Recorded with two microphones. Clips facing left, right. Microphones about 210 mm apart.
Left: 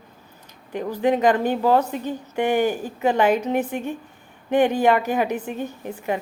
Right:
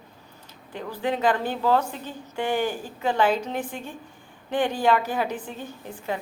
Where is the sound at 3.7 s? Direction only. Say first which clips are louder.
Left 9 dB; 60° left (ahead or behind).